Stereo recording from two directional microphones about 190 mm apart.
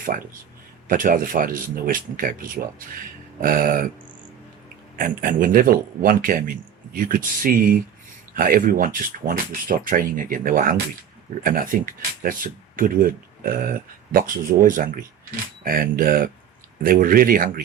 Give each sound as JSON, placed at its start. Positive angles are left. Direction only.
{"t": 0.9, "sound": "speech", "side_deg": -45}
{"t": 3.4, "sound": "speech", "side_deg": -45}
{"t": 4.9, "sound": "speech", "side_deg": -45}